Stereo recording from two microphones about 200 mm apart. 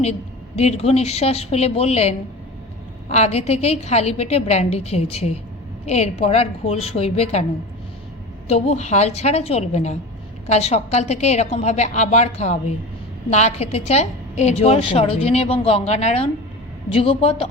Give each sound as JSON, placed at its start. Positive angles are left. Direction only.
{"t": 0.0, "sound": "a woman's voice", "side_deg": 35}
{"t": 8.4, "sound": "a woman's voice", "side_deg": 30}